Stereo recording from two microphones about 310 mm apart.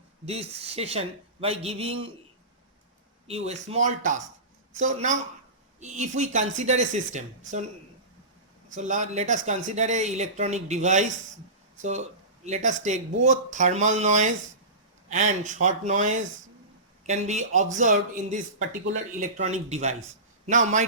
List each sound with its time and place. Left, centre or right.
0.3 s speech: centre
3.2 s speech: centre
8.7 s speech: right